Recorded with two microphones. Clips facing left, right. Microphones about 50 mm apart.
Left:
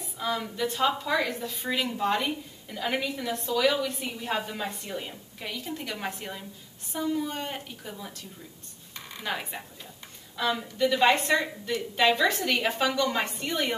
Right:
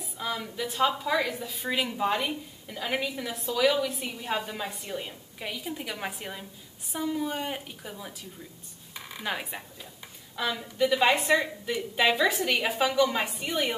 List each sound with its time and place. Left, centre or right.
0.0 s a woman's voice: centre
8.9 s a sound: centre
10.4 s a woman's voice: centre